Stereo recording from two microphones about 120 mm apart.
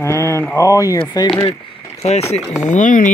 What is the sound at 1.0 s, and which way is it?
Speech, 40° left (ahead or behind).